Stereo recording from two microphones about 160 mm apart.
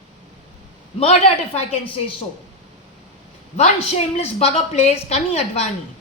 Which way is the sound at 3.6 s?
40° left (ahead or behind).